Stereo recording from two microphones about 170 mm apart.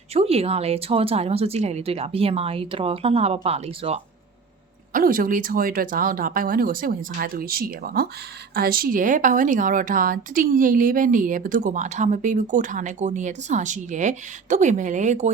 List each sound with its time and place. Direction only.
0.1 s speech: 35° right (ahead or behind)
4.9 s a woman's voice: 55° right (ahead or behind)